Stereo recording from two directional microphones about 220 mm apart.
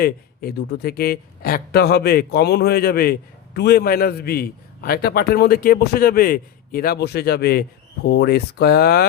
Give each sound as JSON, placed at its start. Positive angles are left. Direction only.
{"t": 0.0, "sound": "speech", "side_deg": 45}